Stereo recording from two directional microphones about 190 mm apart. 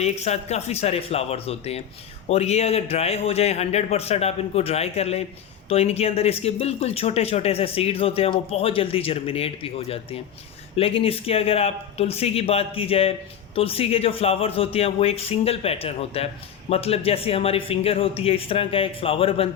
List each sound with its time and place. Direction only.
0.0 s speech: 35° left (ahead or behind)